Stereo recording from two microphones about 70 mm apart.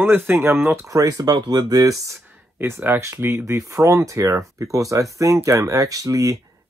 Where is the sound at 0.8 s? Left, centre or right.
Right.